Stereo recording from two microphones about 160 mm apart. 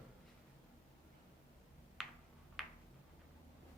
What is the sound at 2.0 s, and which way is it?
Tick-tock, centre (ahead or behind).